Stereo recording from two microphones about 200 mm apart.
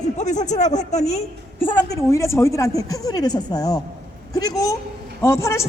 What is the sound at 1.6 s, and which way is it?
Speech, 20° left (ahead or behind).